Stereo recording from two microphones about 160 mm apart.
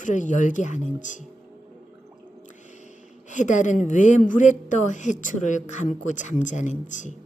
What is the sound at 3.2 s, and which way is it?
Speech, 50° left (ahead or behind).